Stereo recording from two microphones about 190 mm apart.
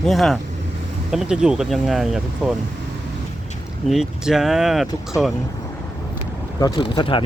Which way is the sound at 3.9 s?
Centre (ahead or behind).